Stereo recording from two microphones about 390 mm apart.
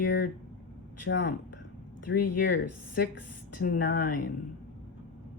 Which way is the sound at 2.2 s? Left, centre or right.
Left.